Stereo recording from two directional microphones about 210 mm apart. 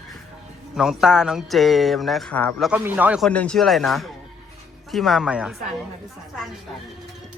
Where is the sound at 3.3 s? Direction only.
5° left (ahead or behind).